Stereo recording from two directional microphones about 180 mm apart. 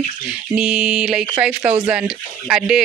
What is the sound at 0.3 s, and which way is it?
Speech, 5° right (ahead or behind).